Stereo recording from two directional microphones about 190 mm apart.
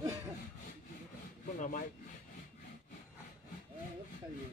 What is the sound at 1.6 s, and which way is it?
Speech, 45° left (ahead or behind).